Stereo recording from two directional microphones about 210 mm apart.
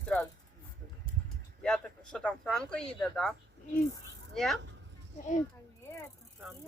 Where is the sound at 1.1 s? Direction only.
40° left (ahead or behind).